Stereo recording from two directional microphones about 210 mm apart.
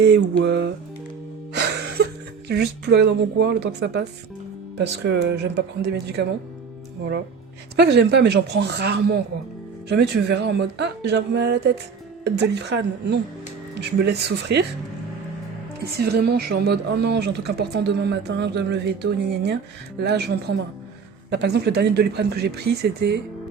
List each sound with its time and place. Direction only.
0.0 s mantra: 55° right (ahead or behind)
1.5 s music: 55° right (ahead or behind)
2.5 s a woman's voice: 50° right (ahead or behind)
5.0 s a woman's voice: 55° right (ahead or behind)
7.8 s a woman's voice: 50° right (ahead or behind)
16.0 s a woman's voice: 50° right (ahead or behind)